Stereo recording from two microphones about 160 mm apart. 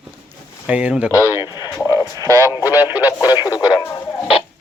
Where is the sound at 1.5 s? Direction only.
25° left (ahead or behind).